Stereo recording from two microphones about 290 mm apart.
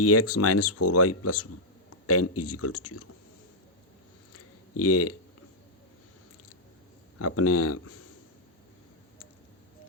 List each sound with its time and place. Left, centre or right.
0.0 s speech: left
4.3 s a sound: left
7.2 s speech: left